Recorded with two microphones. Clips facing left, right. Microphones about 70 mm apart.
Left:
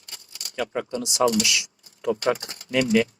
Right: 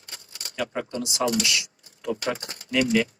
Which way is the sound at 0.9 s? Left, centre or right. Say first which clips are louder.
Left 6 dB; left.